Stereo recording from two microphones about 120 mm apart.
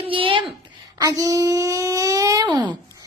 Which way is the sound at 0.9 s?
30° right (ahead or behind).